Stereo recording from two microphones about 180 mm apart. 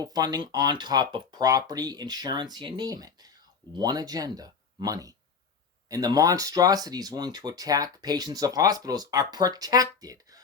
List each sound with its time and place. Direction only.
0.0 s speech: 20° right (ahead or behind)